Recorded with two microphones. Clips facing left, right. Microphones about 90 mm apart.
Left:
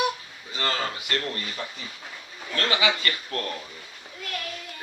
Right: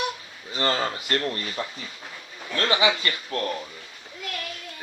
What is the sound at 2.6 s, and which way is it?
Speech, 25° right (ahead or behind).